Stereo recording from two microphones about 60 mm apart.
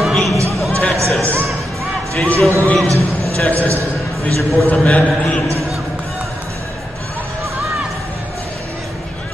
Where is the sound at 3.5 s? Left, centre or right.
Right.